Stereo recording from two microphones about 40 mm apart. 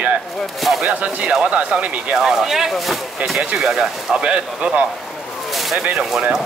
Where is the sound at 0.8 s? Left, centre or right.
Right.